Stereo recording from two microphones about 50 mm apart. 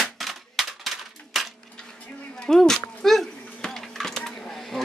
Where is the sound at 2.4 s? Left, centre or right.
Centre.